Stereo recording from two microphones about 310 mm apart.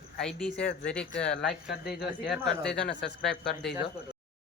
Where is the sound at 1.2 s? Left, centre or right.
Centre.